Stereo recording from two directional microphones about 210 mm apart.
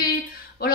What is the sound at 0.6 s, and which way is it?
Speech, 45° left (ahead or behind).